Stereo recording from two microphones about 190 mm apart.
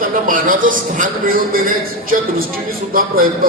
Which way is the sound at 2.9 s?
50° right (ahead or behind).